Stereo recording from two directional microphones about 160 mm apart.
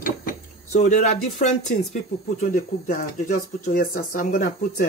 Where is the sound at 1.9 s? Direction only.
55° left (ahead or behind).